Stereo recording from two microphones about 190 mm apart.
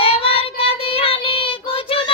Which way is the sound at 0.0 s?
30° left (ahead or behind).